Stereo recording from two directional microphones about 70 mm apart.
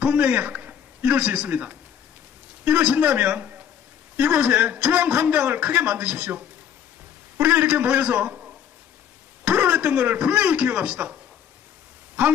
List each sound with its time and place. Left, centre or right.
0.0 s a man's voice: right